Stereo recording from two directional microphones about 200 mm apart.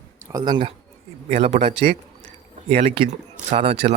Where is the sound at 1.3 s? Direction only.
35° right (ahead or behind).